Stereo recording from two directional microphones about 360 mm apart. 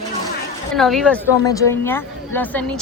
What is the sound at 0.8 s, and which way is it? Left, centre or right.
A woman's voice, centre.